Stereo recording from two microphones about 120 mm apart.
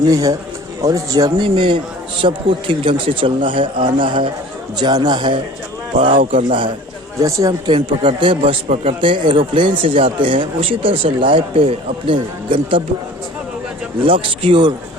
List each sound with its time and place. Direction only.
0.0 s speech: 30° right (ahead or behind)
1.5 s speech: 40° right (ahead or behind)
7.2 s speech: 25° right (ahead or behind)
7.7 s speech: 45° right (ahead or behind)
14.0 s speech: 50° right (ahead or behind)